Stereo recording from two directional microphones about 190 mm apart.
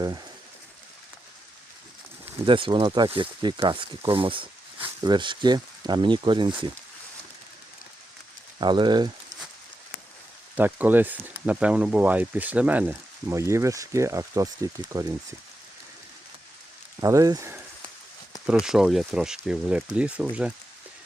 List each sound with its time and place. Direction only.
2.4 s speech: 25° right (ahead or behind)
8.6 s speech: 25° right (ahead or behind)
10.6 s speech: 10° right (ahead or behind)
17.0 s speech: 15° right (ahead or behind)
18.6 s speech: centre (ahead or behind)